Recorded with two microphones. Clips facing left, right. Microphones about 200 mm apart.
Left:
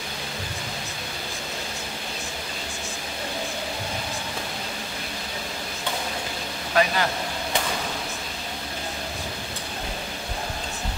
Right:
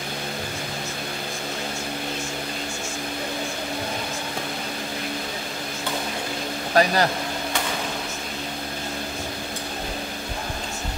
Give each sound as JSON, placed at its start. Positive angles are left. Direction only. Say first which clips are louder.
{"t": 6.7, "sound": "speech", "louder": "right 3 dB", "side_deg": -40}